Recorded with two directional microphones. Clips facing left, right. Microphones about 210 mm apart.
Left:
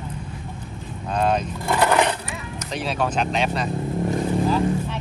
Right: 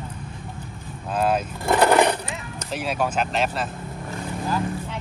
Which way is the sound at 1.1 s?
5° right (ahead or behind).